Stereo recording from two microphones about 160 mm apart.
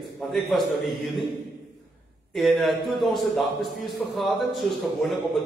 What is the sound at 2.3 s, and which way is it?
A man's voice, centre (ahead or behind).